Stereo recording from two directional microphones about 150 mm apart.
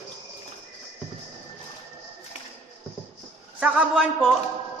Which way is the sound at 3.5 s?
10° right (ahead or behind).